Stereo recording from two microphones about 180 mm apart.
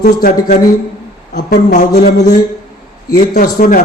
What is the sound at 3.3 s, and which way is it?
Speech, 45° left (ahead or behind).